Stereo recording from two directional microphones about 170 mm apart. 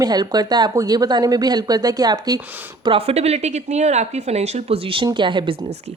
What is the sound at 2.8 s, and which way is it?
A woman's voice, 35° right (ahead or behind).